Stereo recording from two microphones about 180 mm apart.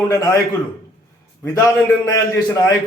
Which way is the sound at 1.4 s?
15° left (ahead or behind).